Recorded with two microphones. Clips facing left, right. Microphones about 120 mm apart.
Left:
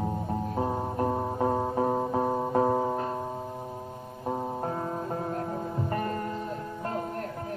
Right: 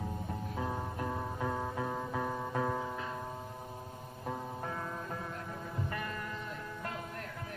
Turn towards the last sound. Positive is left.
turn(degrees=40)  # may be behind; listen again after turning